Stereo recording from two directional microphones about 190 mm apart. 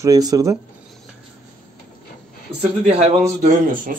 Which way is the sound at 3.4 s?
45° right (ahead or behind).